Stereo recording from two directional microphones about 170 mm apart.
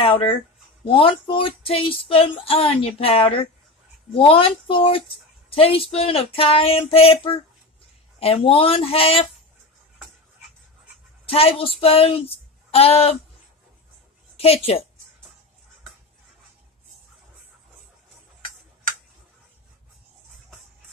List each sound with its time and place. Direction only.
0.8 s speech: 30° left (ahead or behind)
11.2 s speech: 35° left (ahead or behind)
14.3 s speech: 35° left (ahead or behind)